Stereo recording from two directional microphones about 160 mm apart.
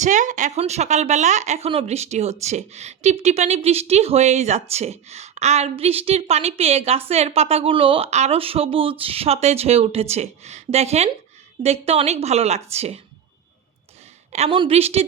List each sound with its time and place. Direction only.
0.0 s a woman's voice: 50° right (ahead or behind)
14.3 s a woman's voice: 40° right (ahead or behind)